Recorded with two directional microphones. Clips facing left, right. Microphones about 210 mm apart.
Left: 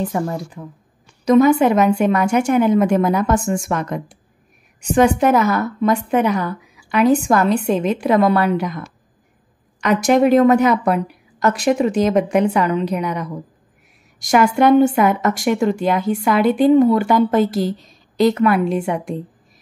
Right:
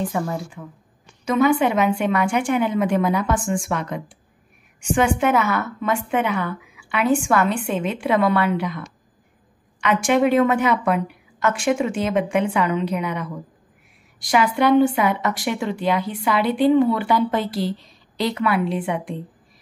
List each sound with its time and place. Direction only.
0.1 s a woman's voice: 40° left (ahead or behind)